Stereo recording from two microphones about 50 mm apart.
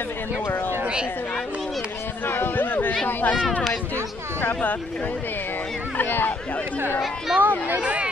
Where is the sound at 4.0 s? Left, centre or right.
Right.